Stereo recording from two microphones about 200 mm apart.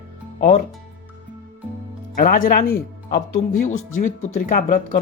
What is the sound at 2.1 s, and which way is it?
Speech, 45° left (ahead or behind).